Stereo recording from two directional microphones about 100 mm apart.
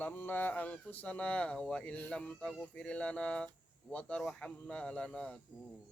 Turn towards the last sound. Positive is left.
turn(degrees=10)  # may be behind; listen again after turning